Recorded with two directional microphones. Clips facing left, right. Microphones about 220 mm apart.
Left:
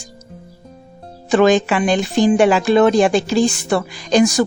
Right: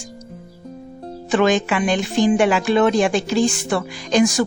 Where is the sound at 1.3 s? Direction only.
35° left (ahead or behind).